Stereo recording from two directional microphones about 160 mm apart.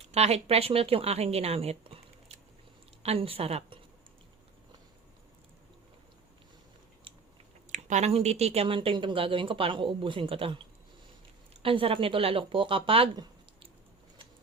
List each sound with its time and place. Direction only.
0.1 s speech: 40° right (ahead or behind)
7.1 s chewing: 30° right (ahead or behind)
7.7 s speech: 45° right (ahead or behind)
11.6 s speech: 35° right (ahead or behind)